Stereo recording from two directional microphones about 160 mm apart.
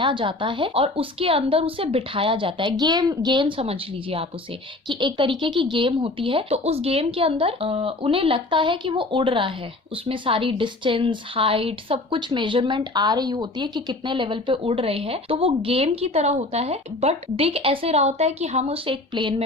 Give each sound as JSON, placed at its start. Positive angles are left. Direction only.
{"t": 0.0, "sound": "a woman's voice", "side_deg": -30}